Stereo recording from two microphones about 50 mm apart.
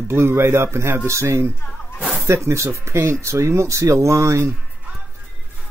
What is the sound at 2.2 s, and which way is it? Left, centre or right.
Speech, right.